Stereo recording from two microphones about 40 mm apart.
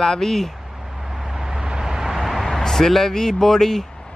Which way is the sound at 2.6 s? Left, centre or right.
Centre.